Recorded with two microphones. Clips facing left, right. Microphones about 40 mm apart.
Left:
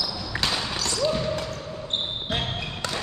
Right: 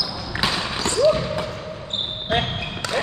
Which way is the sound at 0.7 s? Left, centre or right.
Right.